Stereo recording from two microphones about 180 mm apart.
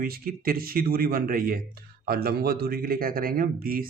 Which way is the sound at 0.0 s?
55° right (ahead or behind).